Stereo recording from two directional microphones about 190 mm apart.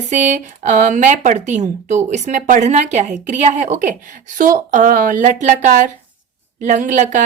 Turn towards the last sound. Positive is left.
turn(degrees=-40)  # may be behind; listen again after turning